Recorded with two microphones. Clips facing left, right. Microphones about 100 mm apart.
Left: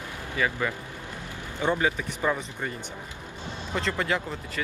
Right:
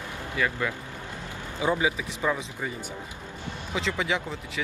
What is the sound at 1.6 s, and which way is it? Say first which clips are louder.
Speech: even; 10° right (ahead or behind).